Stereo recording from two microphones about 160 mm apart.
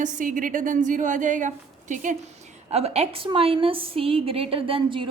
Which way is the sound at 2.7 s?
40° right (ahead or behind).